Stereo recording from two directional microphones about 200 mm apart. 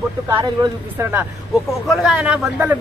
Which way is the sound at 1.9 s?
5° right (ahead or behind).